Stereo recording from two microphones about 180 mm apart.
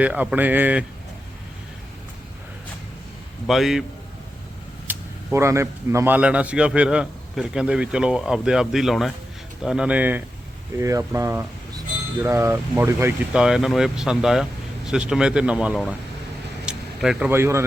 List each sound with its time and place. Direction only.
0.0 s speech: 5° right (ahead or behind)
3.4 s a man's voice: centre (ahead or behind)
4.9 s a man's voice: 15° right (ahead or behind)